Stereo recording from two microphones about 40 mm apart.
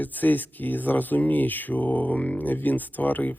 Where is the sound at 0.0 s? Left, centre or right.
Left.